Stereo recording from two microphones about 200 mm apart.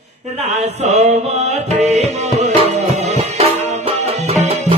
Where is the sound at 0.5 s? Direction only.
35° right (ahead or behind).